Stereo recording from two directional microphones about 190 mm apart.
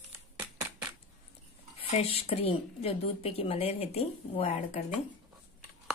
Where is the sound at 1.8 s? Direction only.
30° left (ahead or behind).